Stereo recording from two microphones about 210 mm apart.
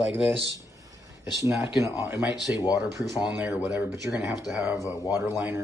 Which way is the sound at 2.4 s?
20° left (ahead or behind).